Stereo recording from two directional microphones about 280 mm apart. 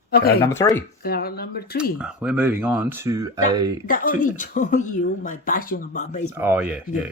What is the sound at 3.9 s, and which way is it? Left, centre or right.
Speech, left.